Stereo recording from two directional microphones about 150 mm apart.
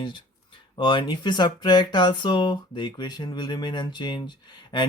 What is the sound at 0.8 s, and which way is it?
Speech, 30° left (ahead or behind).